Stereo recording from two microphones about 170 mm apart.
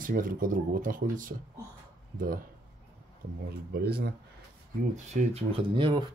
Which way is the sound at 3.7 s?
70° right (ahead or behind).